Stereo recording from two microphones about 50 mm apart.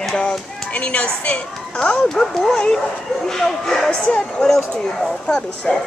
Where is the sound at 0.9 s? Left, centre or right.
Left.